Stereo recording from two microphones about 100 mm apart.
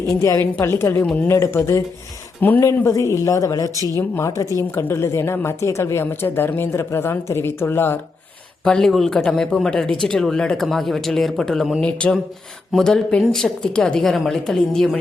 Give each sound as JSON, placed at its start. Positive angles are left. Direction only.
{"t": 0.2, "sound": "a woman's voice", "side_deg": 30}
{"t": 1.4, "sound": "a woman's voice", "side_deg": 30}
{"t": 4.7, "sound": "a woman's voice", "side_deg": 25}
{"t": 8.6, "sound": "a man's voice", "side_deg": 5}